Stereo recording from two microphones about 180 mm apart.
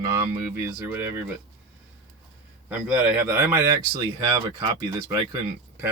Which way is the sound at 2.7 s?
10° right (ahead or behind).